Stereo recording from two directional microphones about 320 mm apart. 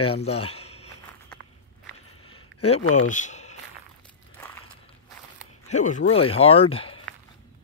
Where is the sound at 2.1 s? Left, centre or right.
Left.